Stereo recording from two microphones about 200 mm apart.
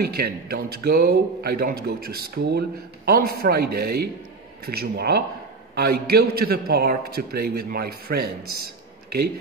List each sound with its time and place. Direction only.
0.0 s speech: 50° right (ahead or behind)